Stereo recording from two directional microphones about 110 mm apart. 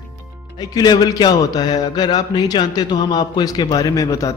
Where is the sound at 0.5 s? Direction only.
40° left (ahead or behind).